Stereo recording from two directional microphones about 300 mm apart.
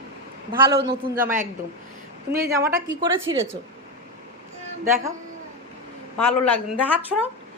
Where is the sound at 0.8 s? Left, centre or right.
Right.